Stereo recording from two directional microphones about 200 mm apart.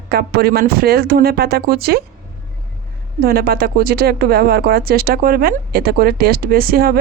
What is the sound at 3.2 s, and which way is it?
Speech, 50° right (ahead or behind).